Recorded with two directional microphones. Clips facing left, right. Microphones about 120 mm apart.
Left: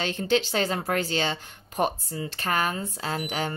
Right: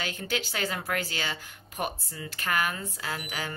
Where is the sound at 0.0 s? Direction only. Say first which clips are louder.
Left 8 dB; 30° left (ahead or behind).